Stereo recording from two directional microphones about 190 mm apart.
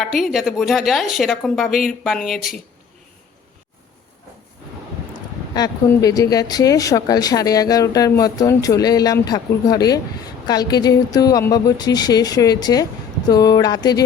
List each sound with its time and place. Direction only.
0.0 s a woman's voice: centre (ahead or behind)
5.1 s a sound: 20° left (ahead or behind)
6.3 s speech: 20° left (ahead or behind)